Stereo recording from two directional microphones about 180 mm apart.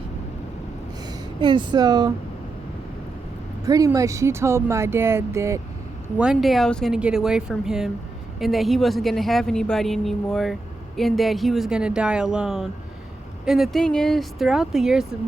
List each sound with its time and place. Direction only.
1.4 s speech: 25° right (ahead or behind)
3.7 s speech: 20° right (ahead or behind)
6.1 s a woman's voice: 5° right (ahead or behind)